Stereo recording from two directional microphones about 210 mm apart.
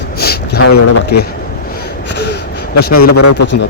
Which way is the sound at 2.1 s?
55° left (ahead or behind).